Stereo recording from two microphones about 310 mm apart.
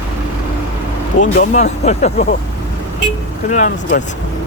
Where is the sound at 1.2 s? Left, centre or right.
Left.